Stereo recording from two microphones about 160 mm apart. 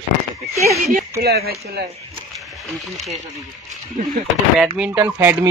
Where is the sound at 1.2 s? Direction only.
80° right.